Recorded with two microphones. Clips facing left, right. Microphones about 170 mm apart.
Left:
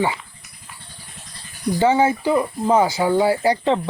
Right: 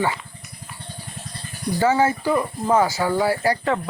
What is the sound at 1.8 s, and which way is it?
Speech, 20° left (ahead or behind).